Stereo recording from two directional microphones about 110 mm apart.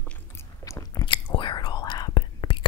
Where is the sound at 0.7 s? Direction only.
30° left (ahead or behind).